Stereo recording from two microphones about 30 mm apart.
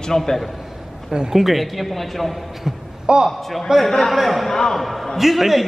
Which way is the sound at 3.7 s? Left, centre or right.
Centre.